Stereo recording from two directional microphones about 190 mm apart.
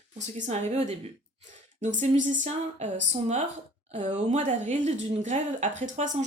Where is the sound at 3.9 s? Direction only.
35° right (ahead or behind).